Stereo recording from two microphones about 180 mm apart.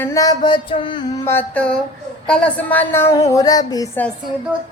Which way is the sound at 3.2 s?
20° left (ahead or behind).